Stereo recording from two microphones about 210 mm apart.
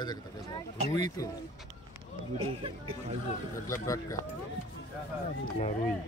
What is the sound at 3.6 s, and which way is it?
Speech, 15° left (ahead or behind).